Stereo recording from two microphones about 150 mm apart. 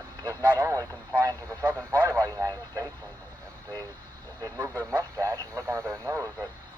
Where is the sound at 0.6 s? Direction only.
25° right (ahead or behind).